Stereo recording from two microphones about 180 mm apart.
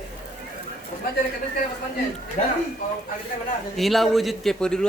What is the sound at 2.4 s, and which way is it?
Speech, 45° left (ahead or behind).